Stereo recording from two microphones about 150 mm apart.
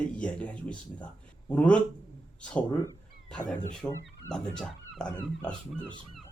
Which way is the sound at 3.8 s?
15° left (ahead or behind).